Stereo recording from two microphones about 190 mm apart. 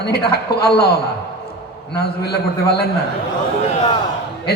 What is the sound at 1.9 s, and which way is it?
Speech, 55° left (ahead or behind).